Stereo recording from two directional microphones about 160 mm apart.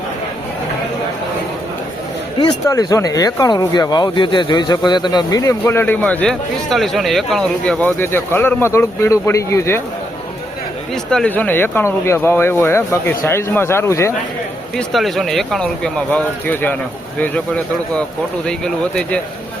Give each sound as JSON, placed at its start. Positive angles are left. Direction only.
{"t": 2.4, "sound": "speech", "side_deg": 20}
{"t": 11.1, "sound": "speech", "side_deg": 5}
{"t": 14.8, "sound": "speech", "side_deg": 0}